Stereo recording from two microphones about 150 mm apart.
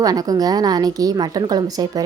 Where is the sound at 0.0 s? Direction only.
25° right (ahead or behind).